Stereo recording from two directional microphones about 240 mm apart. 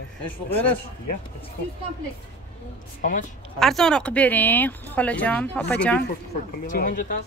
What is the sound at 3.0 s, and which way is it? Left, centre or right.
Speech, left.